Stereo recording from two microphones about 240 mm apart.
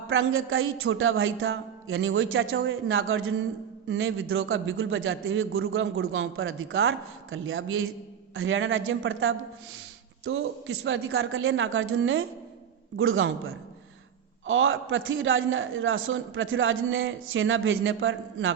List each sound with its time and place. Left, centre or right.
0.1 s a man's voice: right